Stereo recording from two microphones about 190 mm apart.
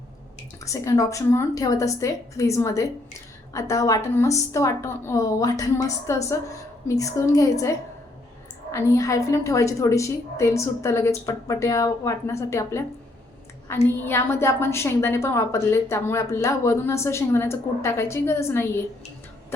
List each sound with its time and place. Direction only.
0.6 s a woman's voice: 15° left (ahead or behind)
13.8 s a woman's voice: 10° left (ahead or behind)